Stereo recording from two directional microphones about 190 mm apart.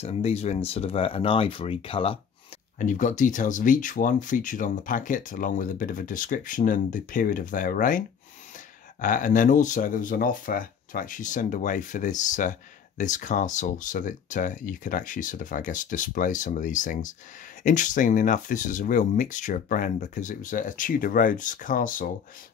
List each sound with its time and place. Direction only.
0.0 s speech: 35° left (ahead or behind)
2.8 s speech: 40° left (ahead or behind)
9.0 s speech: 45° left (ahead or behind)